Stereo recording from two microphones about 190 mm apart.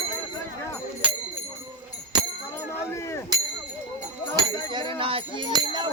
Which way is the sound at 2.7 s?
15° left (ahead or behind).